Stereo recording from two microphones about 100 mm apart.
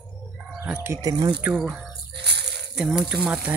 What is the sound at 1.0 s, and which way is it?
Speech, 45° right (ahead or behind).